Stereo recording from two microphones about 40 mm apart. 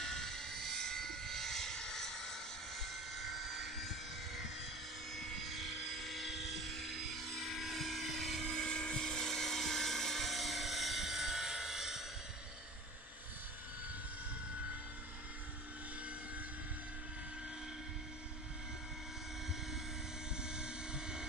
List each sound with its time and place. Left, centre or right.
0.0 s vehicle: centre
2.8 s helicopter: centre
5.1 s vehicle: centre
20.4 s vehicle: right